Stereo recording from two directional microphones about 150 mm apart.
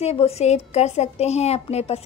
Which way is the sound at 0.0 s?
45° left (ahead or behind).